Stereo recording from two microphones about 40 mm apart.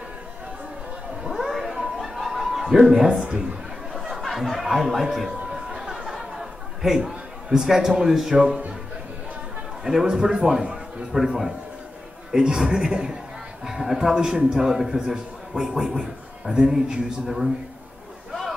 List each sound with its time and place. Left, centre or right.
1.3 s cat: centre
2.7 s speech: centre
3.9 s a sound: centre
4.4 s speech: centre
5.8 s chatter: centre
6.8 s speech: centre
9.8 s a man's voice: centre